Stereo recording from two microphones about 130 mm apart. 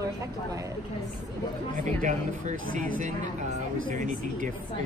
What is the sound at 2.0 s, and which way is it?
Speech, 80° right.